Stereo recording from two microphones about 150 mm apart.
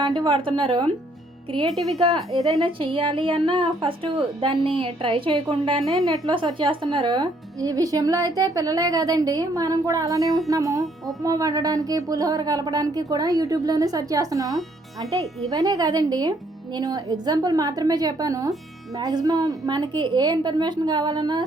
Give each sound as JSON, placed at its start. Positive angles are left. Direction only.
{"t": 0.0, "sound": "a woman's voice", "side_deg": -30}
{"t": 1.7, "sound": "a woman's voice", "side_deg": 0}
{"t": 2.0, "sound": "a woman's voice", "side_deg": -30}